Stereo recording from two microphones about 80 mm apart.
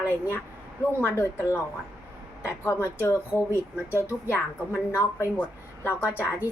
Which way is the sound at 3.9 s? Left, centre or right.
Right.